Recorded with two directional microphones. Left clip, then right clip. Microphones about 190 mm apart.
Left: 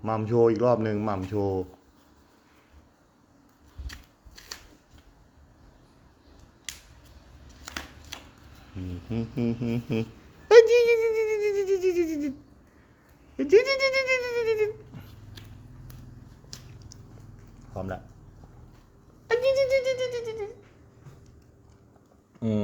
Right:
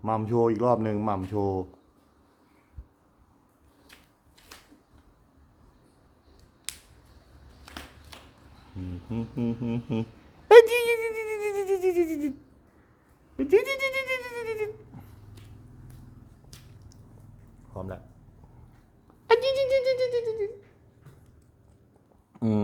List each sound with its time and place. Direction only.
0.0 s speech: 15° right (ahead or behind)
3.9 s a sound: 15° left (ahead or behind)
9.0 s speech: 5° right (ahead or behind)
10.5 s a sound: 30° right (ahead or behind)
13.3 s speech: 5° right (ahead or behind)
16.5 s a sound: centre (ahead or behind)
17.7 s speech: centre (ahead or behind)
19.3 s music: 45° right (ahead or behind)
22.4 s speech: 40° right (ahead or behind)